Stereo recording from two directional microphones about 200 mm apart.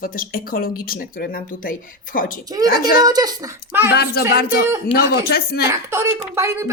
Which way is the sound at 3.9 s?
55° left (ahead or behind).